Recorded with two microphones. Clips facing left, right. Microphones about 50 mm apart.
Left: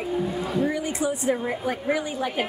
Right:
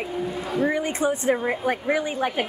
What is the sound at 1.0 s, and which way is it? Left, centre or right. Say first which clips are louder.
Speech: right 3 dB; right.